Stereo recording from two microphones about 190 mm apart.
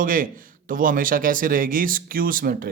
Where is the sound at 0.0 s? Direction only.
45° right (ahead or behind).